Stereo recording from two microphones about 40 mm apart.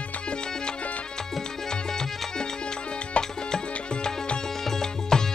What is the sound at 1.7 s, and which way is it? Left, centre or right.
Music, centre.